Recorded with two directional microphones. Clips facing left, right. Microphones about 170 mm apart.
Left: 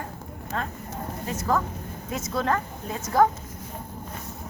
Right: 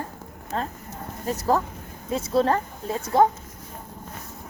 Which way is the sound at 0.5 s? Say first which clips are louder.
Right 2 dB; 35° right (ahead or behind).